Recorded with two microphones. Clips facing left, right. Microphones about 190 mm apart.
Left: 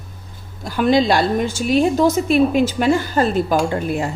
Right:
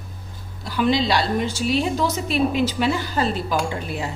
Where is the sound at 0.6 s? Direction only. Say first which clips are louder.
Left 5 dB; 50° left (ahead or behind).